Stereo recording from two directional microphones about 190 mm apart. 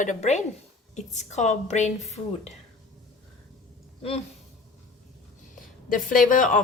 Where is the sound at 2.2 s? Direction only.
25° left (ahead or behind).